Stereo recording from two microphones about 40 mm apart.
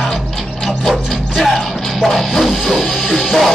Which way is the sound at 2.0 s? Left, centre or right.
Centre.